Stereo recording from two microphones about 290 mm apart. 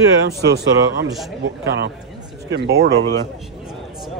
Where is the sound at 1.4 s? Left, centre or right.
Right.